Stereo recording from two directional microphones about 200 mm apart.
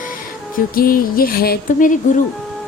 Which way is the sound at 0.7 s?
45° left (ahead or behind).